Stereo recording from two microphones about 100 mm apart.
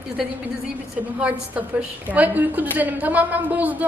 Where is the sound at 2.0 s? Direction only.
15° right (ahead or behind).